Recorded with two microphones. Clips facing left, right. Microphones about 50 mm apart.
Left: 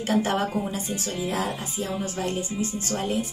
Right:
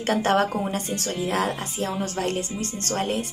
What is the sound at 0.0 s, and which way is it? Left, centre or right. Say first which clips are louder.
Speech: right 3 dB; right.